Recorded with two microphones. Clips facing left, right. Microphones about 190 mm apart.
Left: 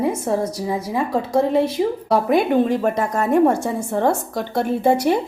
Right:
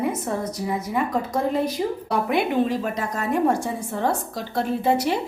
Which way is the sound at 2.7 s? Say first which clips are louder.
Left 6 dB; 50° left (ahead or behind).